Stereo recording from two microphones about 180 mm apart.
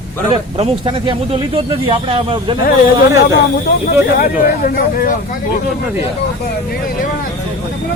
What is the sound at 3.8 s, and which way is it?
Speech, 50° left (ahead or behind).